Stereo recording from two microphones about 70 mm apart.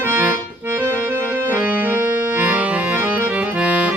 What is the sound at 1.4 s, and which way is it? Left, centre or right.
Accordion, right.